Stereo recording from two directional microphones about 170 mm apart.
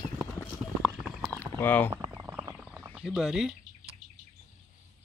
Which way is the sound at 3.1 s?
5° right (ahead or behind).